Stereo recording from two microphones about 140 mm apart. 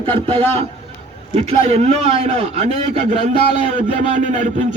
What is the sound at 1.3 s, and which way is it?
A man's voice, 45° right (ahead or behind).